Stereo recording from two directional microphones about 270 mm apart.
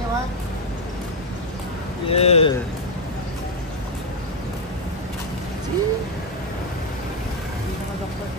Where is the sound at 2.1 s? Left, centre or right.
Left.